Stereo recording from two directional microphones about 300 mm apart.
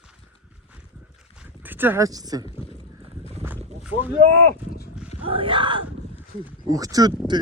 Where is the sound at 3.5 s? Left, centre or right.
Centre.